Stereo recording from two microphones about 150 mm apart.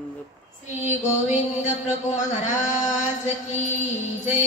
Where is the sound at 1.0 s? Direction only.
50° left (ahead or behind).